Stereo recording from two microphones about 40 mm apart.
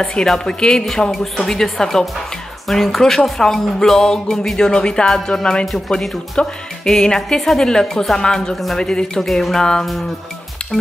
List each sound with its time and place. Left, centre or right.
0.0 s speech: centre
4.6 s music: centre
5.9 s speech: centre